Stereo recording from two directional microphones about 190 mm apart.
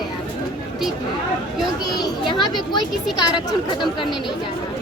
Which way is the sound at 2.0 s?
25° left (ahead or behind).